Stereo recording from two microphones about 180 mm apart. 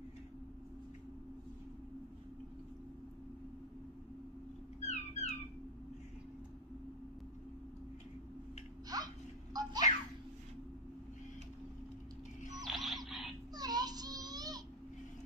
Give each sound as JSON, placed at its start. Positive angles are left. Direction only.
{"t": 4.8, "sound": "music", "side_deg": 40}
{"t": 8.8, "sound": "a sound", "side_deg": -20}
{"t": 12.6, "sound": "music", "side_deg": 0}
{"t": 13.6, "sound": "child singing", "side_deg": -20}